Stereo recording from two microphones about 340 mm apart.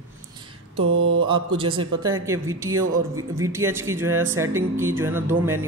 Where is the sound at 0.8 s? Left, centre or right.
Right.